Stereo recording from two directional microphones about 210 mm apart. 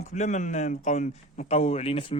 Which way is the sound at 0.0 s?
35° left (ahead or behind).